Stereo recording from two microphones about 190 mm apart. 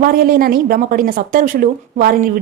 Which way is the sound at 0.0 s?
50° right (ahead or behind).